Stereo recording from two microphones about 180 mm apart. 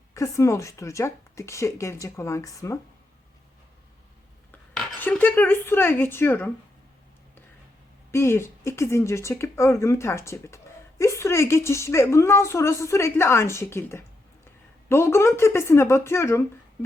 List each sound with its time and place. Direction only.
0.1 s speech: 15° left (ahead or behind)
4.7 s speech: centre (ahead or behind)
8.1 s speech: 15° left (ahead or behind)